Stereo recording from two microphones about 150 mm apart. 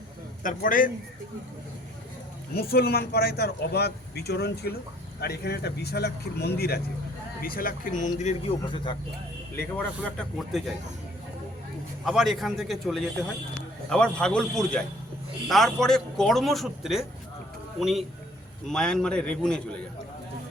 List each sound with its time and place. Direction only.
0.4 s speech: 65° left (ahead or behind)
2.6 s speech: 90° left
7.4 s speech: 75° left (ahead or behind); by 8.4 s 55° left (ahead or behind)
8.7 s speech: 35° left (ahead or behind)
9.6 s speech: 10° left (ahead or behind)
12.0 s a man's voice: centre (ahead or behind)